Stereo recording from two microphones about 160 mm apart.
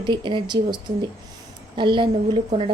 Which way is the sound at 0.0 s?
30° right (ahead or behind).